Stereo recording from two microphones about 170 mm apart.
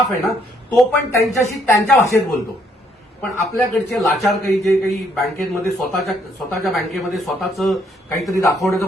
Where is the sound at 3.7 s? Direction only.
Centre (ahead or behind).